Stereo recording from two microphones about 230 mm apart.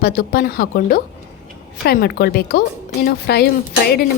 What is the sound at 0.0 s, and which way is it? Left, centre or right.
A woman's voice, left.